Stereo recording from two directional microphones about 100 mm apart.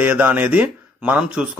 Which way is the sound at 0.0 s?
20° right (ahead or behind).